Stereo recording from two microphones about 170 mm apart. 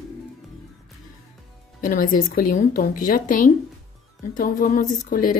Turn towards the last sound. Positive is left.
turn(degrees=55)  # may be behind; listen again after turning